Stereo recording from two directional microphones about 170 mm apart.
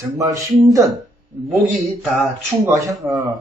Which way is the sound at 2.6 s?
15° right (ahead or behind).